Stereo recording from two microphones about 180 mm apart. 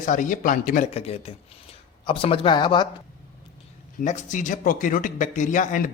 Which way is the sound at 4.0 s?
45° left (ahead or behind).